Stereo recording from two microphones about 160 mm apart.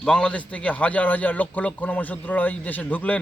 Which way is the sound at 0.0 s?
5° left (ahead or behind).